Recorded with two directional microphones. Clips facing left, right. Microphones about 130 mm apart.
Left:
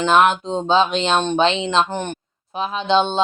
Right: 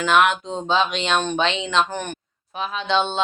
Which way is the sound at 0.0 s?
30° left (ahead or behind).